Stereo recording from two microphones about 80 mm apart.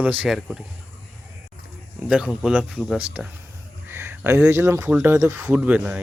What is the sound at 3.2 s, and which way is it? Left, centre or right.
Speech, centre.